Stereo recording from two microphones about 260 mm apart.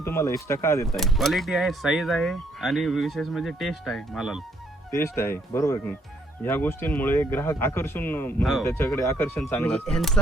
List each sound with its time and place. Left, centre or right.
0.0 s speech: centre
4.9 s a man's voice: centre